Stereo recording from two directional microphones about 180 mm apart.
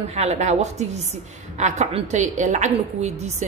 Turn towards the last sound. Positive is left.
turn(degrees=-40)  # may be behind; listen again after turning